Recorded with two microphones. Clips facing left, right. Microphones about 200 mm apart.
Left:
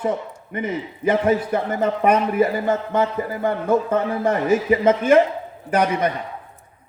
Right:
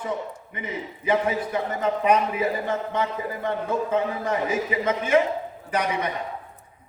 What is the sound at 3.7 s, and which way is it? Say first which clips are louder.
Speech: left 5 dB; 75° left (ahead or behind).